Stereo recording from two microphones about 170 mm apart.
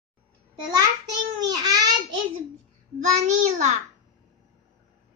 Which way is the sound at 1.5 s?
20° right (ahead or behind).